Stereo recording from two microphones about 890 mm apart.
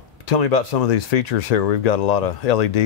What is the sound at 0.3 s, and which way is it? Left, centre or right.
Speech, left.